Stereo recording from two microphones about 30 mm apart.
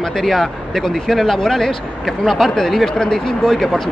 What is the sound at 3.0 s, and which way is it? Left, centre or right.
Speech, centre.